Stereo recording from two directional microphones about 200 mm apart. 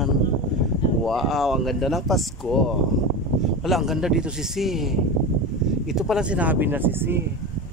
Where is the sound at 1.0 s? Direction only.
Centre (ahead or behind).